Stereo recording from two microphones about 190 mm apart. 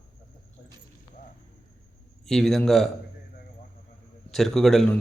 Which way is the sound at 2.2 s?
Centre (ahead or behind).